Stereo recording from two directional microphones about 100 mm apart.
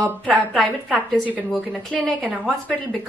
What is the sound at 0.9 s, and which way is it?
Speech, 15° right (ahead or behind).